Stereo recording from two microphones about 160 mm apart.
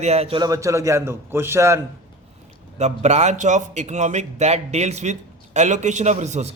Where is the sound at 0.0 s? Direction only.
40° right (ahead or behind).